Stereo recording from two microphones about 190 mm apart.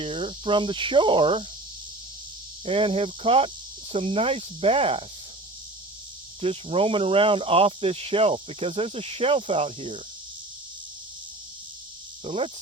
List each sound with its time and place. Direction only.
0.0 s cricket: 25° right (ahead or behind)
2.6 s speech: 30° right (ahead or behind)
6.4 s speech: 30° right (ahead or behind)
12.2 s speech: 30° right (ahead or behind)